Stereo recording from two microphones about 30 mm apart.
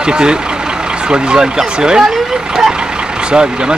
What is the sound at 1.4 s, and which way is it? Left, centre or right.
Speech, right.